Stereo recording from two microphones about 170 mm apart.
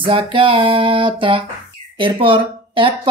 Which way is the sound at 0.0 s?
30° right (ahead or behind).